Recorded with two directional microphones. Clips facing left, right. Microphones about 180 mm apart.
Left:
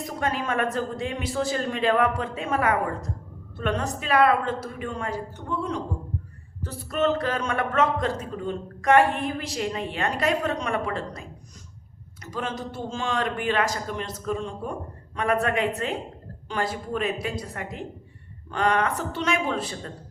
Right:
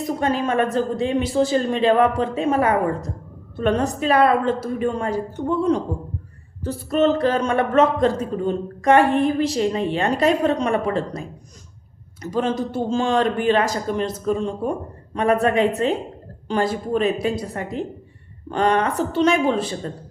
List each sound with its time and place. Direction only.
0.0 s a man's voice: 30° right (ahead or behind)